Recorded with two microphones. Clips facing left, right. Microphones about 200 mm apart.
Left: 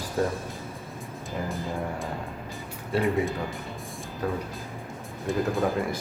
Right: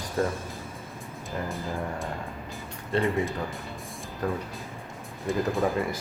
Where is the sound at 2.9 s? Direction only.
Centre (ahead or behind).